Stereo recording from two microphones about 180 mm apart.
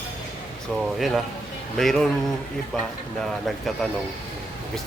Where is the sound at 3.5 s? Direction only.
Centre (ahead or behind).